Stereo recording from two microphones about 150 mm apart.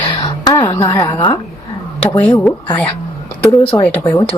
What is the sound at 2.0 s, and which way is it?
Speech, 15° left (ahead or behind).